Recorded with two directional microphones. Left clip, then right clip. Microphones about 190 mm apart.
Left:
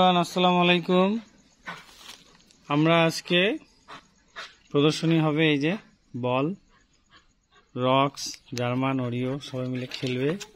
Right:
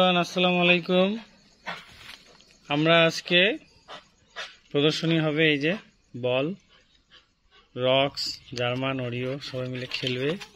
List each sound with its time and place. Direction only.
0.0 s speech: 60° left (ahead or behind)
2.6 s speech: 50° left (ahead or behind)
7.7 s speech: 50° left (ahead or behind)